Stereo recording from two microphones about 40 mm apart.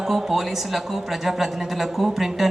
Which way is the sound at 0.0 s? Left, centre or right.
Centre.